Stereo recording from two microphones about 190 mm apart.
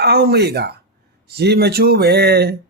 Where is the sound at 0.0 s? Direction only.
55° right (ahead or behind).